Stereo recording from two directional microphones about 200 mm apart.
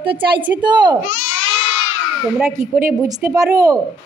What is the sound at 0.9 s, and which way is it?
Speech, 35° left (ahead or behind).